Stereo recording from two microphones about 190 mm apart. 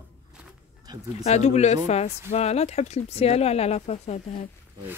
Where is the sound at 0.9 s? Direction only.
20° right (ahead or behind).